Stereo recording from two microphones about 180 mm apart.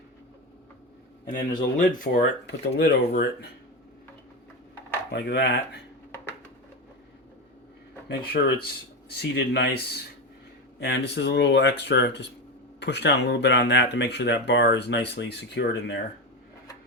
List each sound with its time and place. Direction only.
1.3 s speech: 50° left (ahead or behind); by 3.2 s 65° left (ahead or behind)
5.1 s speech: 70° left (ahead or behind)
8.0 s speech: 65° left (ahead or behind)